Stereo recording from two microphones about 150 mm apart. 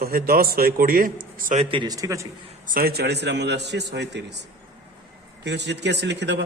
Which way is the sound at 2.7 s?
85° right.